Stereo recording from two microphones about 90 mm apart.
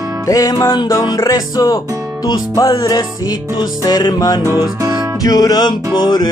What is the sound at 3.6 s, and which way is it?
Music, 45° left (ahead or behind).